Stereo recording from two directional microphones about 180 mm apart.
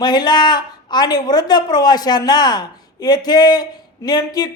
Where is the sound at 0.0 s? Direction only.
25° left (ahead or behind).